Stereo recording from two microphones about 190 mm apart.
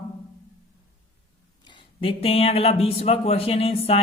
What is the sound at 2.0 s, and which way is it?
Speech, 30° left (ahead or behind).